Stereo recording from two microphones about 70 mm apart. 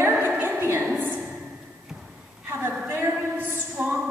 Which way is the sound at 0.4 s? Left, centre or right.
Right.